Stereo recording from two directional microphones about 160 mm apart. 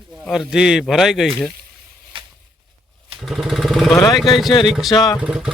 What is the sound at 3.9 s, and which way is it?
Speech, 20° left (ahead or behind).